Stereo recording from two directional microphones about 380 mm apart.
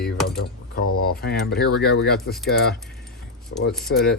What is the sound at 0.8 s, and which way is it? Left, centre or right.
Speech, left.